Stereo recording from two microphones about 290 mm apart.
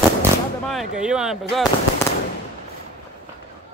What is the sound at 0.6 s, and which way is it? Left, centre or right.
Speech, centre.